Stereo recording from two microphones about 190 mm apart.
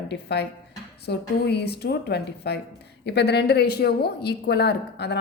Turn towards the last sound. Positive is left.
turn(degrees=60)  # may be behind; listen again after turning